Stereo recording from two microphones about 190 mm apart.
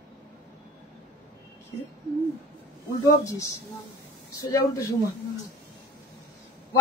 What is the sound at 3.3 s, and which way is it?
Speech, 15° left (ahead or behind).